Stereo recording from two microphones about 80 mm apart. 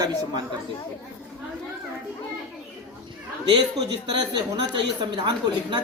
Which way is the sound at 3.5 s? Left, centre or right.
Right.